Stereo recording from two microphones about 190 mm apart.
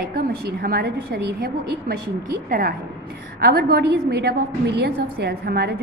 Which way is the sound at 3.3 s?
55° right (ahead or behind).